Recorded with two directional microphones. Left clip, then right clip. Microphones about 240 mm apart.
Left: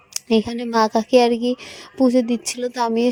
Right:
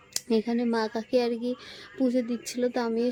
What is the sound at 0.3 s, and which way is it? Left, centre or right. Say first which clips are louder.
Speech: left 6 dB; left.